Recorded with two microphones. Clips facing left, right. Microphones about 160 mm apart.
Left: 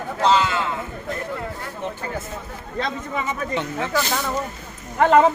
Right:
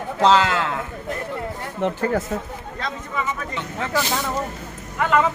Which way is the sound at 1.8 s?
90° right.